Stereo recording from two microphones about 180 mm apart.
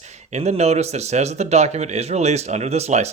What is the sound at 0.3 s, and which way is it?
Speech, 40° right (ahead or behind).